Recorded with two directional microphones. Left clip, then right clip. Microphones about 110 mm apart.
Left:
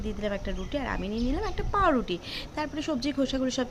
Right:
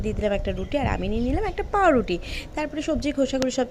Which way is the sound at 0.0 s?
35° right (ahead or behind).